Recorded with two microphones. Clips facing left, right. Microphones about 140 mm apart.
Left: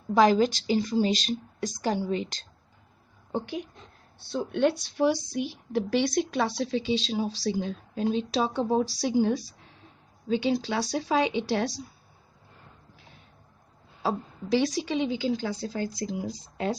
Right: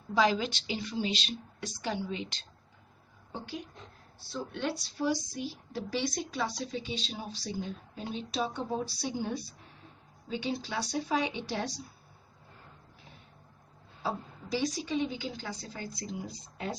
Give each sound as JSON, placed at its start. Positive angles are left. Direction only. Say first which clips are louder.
{"t": 0.1, "sound": "a woman's voice", "louder": "left 7 dB", "side_deg": 50}
{"t": 3.3, "sound": "speech", "louder": "left 9 dB", "side_deg": 55}
{"t": 4.6, "sound": "a woman's voice", "louder": "left 9 dB", "side_deg": 65}
{"t": 6.6, "sound": "a woman's voice", "louder": "left 9 dB", "side_deg": 85}
{"t": 14.5, "sound": "a woman's voice", "louder": "left 6 dB", "side_deg": 85}